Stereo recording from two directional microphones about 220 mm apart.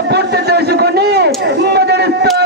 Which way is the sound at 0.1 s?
50° right (ahead or behind).